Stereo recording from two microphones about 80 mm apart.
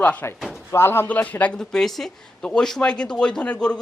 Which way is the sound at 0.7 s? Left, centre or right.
Left.